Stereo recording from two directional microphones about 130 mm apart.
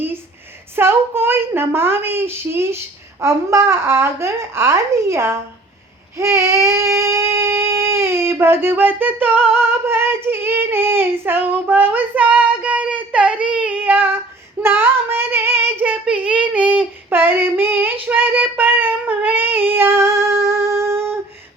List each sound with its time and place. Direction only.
0.8 s a woman's voice: 15° right (ahead or behind)
6.1 s a sound: 20° right (ahead or behind)
14.6 s child singing: 15° right (ahead or behind)